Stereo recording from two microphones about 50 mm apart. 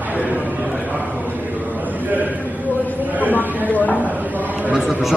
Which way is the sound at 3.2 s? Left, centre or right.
Left.